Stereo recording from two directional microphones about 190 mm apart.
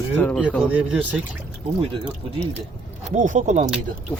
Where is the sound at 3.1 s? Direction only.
40° right (ahead or behind).